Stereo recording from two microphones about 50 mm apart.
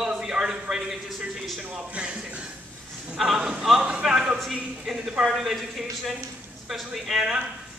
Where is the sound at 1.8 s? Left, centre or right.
Right.